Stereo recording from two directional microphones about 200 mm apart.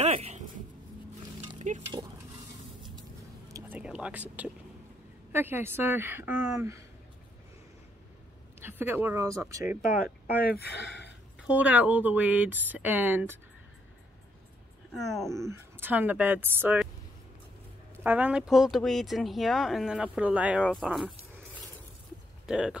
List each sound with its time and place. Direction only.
0.0 s a sound: 30° right (ahead or behind)
1.6 s stir: 40° right (ahead or behind)
3.5 s a sound: 10° right (ahead or behind)
5.3 s speech: 10° right (ahead or behind)
8.5 s speech: 10° right (ahead or behind)
9.8 s speech: 45° left (ahead or behind); by 11.1 s 60° left (ahead or behind)
11.4 s speech: 5° right (ahead or behind)
15.3 s speech: 15° right (ahead or behind)
17.9 s speech: 10° right (ahead or behind)
22.5 s speech: 5° right (ahead or behind)